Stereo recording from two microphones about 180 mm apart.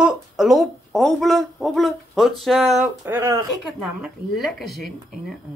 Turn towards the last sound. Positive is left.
turn(degrees=0)  # may be behind; listen again after turning